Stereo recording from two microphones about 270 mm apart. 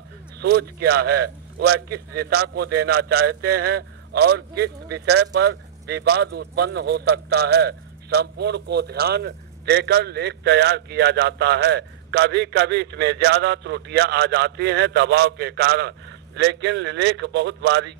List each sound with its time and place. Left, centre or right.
0.4 s a man's voice: right